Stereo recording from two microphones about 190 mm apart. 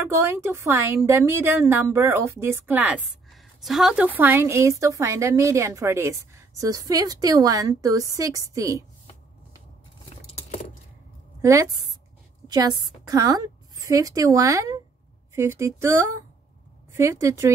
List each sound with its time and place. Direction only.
0.0 s a woman's voice: 10° right (ahead or behind)
10.2 s a sound: 35° left (ahead or behind)
11.4 s a woman's voice: 15° right (ahead or behind)